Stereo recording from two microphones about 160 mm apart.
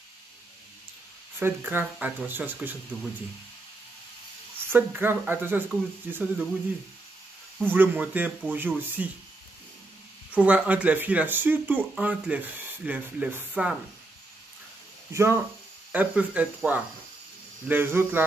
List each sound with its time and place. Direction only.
1.4 s speech: 10° right (ahead or behind)
4.6 s speech: 10° right (ahead or behind)
7.6 s speech: 10° right (ahead or behind)
10.3 s speech: 10° right (ahead or behind)
15.1 s speech: 15° right (ahead or behind)